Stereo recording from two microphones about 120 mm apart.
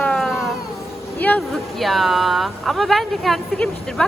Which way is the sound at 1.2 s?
15° left (ahead or behind).